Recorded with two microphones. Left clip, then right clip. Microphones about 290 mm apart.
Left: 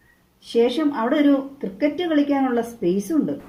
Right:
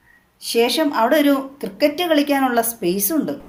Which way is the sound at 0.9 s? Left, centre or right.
Right.